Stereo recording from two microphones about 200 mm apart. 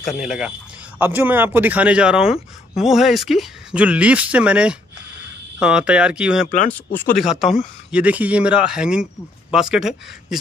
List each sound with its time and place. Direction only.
0.0 s speech: centre (ahead or behind)
6.7 s speech: 10° left (ahead or behind)
7.2 s speech: centre (ahead or behind)